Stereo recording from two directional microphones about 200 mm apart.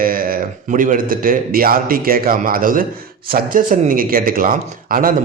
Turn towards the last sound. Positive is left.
turn(degrees=-45)  # may be behind; listen again after turning